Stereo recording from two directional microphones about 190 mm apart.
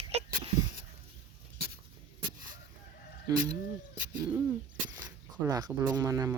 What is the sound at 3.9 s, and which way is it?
Speech, 10° right (ahead or behind).